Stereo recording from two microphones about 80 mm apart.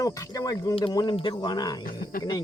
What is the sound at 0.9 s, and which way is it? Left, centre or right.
Speech, left.